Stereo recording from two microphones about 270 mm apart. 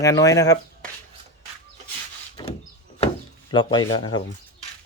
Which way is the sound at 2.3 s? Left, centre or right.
Centre.